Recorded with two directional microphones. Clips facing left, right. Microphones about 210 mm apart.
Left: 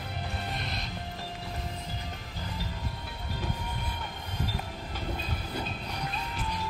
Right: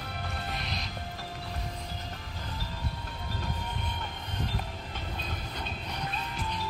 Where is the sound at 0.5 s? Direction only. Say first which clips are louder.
Even; centre (ahead or behind).